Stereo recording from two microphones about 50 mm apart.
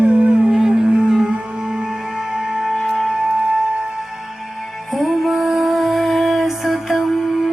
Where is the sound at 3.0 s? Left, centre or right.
Centre.